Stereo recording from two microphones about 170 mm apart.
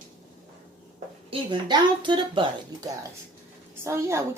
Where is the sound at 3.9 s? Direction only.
15° right (ahead or behind).